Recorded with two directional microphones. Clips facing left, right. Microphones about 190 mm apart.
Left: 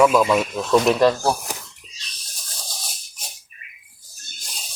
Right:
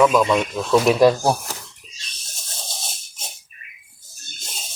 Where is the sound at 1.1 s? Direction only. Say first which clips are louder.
Right 2 dB; 15° right (ahead or behind).